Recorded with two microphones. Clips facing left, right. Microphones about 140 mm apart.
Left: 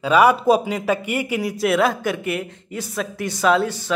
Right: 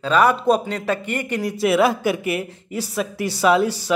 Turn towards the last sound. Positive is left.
turn(degrees=-10)  # may be behind; listen again after turning